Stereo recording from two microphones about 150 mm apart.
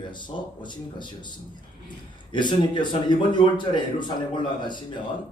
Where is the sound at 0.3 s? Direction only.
40° left (ahead or behind).